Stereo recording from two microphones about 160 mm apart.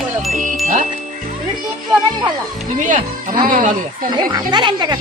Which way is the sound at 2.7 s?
55° right (ahead or behind).